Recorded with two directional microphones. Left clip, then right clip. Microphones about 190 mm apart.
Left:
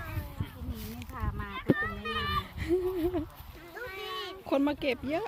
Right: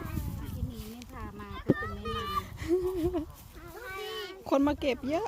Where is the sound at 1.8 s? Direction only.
60° right (ahead or behind).